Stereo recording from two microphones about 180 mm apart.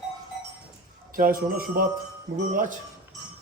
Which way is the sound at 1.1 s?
50° right (ahead or behind).